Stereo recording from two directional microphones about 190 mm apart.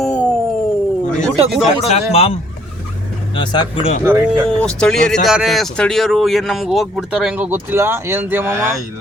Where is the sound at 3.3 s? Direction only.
25° left (ahead or behind).